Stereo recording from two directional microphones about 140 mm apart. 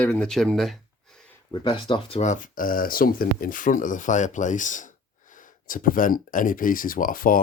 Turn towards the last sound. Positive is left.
turn(degrees=85)